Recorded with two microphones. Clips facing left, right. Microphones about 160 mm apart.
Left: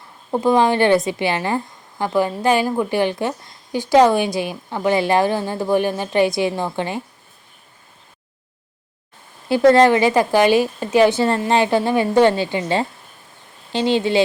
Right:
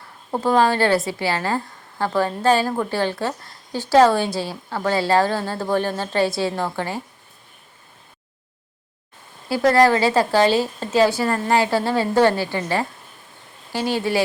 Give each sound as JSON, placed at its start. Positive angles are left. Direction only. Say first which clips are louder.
{"t": 0.4, "sound": "a woman's voice", "louder": "left 2 dB", "side_deg": 20}
{"t": 9.5, "sound": "a woman's voice", "louder": "left 4 dB", "side_deg": 25}